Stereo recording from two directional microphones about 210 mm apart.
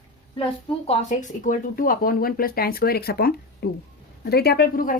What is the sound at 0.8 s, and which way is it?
A woman's voice, 35° left (ahead or behind).